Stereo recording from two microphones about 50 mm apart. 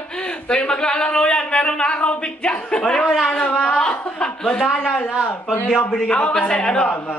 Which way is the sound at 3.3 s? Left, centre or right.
Left.